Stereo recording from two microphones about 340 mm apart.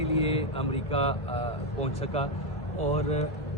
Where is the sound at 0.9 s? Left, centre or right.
Centre.